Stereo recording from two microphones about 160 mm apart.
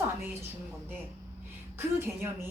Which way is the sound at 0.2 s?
15° right (ahead or behind).